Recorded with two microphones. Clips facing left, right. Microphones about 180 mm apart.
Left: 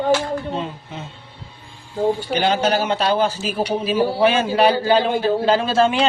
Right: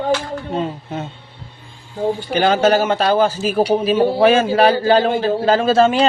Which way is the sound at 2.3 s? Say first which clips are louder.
Right 4 dB; 45° right (ahead or behind).